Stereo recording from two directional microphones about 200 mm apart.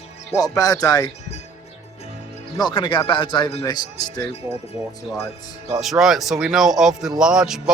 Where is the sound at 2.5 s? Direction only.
25° left (ahead or behind).